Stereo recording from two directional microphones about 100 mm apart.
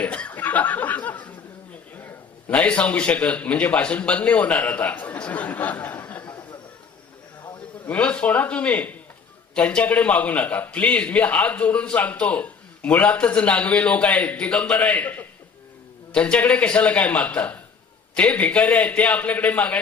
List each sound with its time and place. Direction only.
0.0 s chuckle: 15° left (ahead or behind)
2.0 s a man's voice: 20° left (ahead or behind)
7.9 s a man's voice: 10° left (ahead or behind)